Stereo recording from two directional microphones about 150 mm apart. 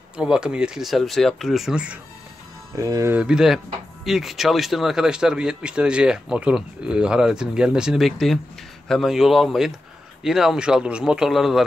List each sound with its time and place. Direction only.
0.2 s speech: 5° right (ahead or behind)
2.7 s speech: 20° right (ahead or behind)
3.2 s speech: 5° right (ahead or behind)